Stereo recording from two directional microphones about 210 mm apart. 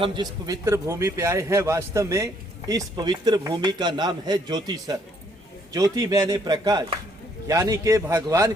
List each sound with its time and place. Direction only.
0.0 s a man's voice: 20° right (ahead or behind)